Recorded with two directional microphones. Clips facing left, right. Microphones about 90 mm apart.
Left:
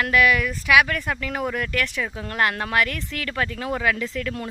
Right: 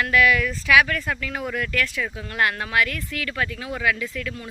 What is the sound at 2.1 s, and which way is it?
Speech, 35° left (ahead or behind).